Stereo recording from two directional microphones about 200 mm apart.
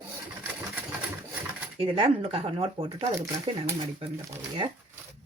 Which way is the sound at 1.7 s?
25° right (ahead or behind).